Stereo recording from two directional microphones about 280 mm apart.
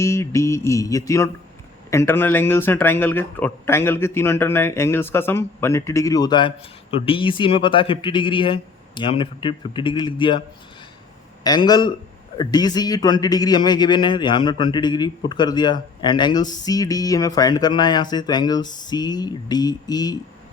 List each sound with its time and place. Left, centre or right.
0.0 s a man's voice: centre
11.4 s a man's voice: centre